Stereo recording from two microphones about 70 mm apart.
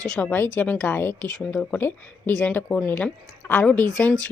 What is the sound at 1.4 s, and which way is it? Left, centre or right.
Speech, centre.